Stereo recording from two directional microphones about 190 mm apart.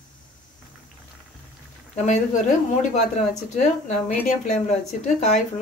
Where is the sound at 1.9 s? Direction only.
35° left (ahead or behind).